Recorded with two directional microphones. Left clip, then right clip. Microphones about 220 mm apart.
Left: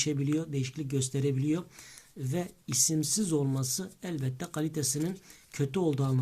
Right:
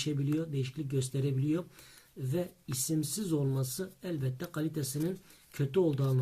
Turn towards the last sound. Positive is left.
turn(degrees=30)  # may be behind; listen again after turning